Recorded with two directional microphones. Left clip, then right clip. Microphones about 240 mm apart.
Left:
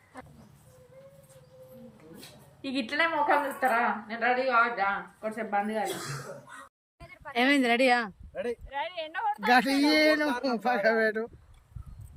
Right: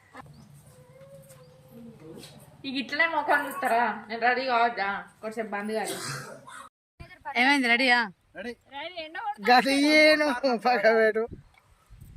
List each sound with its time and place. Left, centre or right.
2.6 s speech: centre
7.0 s a sound: centre
7.3 s speech: centre
9.5 s a man's voice: right